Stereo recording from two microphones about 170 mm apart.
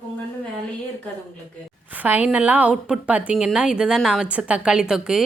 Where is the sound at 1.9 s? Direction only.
10° right (ahead or behind).